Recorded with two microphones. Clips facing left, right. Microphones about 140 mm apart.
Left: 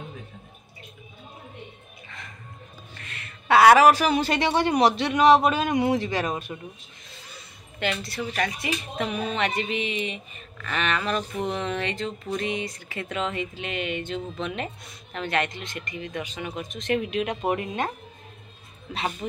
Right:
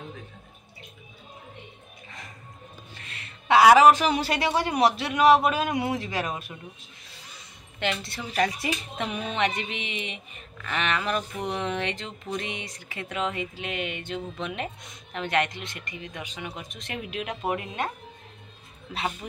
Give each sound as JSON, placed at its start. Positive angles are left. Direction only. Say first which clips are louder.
{"t": 3.4, "sound": "a man's voice", "louder": "even", "side_deg": -15}
{"t": 7.8, "sound": "a woman's voice", "louder": "left 2 dB", "side_deg": -25}